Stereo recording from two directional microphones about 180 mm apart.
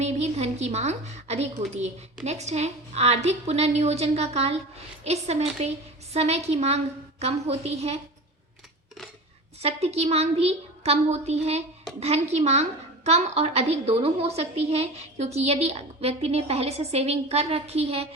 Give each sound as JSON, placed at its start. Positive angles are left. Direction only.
{"t": 0.0, "sound": "a sound", "side_deg": -35}
{"t": 2.2, "sound": "a woman's voice", "side_deg": -40}
{"t": 9.6, "sound": "a woman's voice", "side_deg": -35}